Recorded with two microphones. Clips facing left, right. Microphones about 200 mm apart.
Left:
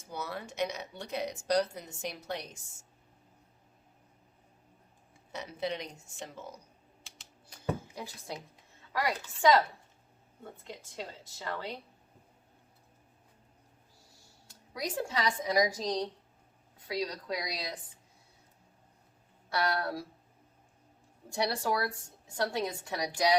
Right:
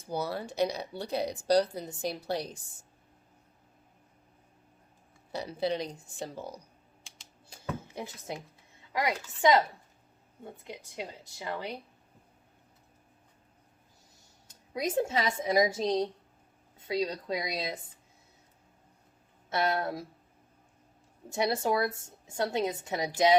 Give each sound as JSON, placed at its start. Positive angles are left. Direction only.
{"t": 0.0, "sound": "speech", "side_deg": -35}
{"t": 5.3, "sound": "speech", "side_deg": -35}
{"t": 7.4, "sound": "a sound", "side_deg": -25}
{"t": 8.9, "sound": "speech", "side_deg": -20}
{"t": 14.1, "sound": "a woman's voice", "side_deg": -20}
{"t": 19.5, "sound": "a woman's voice", "side_deg": -20}
{"t": 21.2, "sound": "a woman's voice", "side_deg": -20}